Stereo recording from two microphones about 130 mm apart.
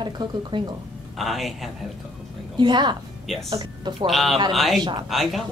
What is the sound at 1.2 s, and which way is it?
Speech, centre (ahead or behind).